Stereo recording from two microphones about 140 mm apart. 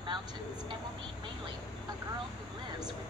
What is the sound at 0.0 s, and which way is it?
Speech, 35° right (ahead or behind).